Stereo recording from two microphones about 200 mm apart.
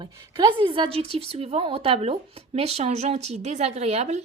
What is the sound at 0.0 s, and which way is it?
A woman's voice, 25° right (ahead or behind).